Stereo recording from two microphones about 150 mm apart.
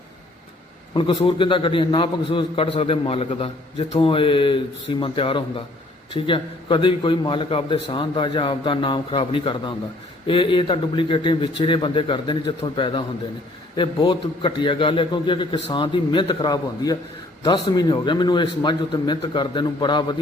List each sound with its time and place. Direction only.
0.9 s a man's voice: 35° left (ahead or behind)